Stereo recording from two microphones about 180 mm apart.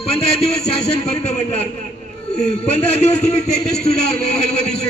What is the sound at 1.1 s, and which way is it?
Speech, 35° left (ahead or behind).